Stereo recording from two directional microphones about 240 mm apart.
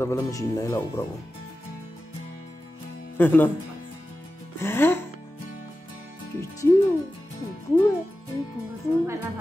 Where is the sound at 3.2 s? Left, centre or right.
Centre.